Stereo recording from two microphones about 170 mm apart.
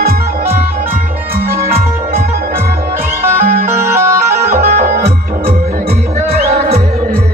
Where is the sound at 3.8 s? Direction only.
15° right (ahead or behind).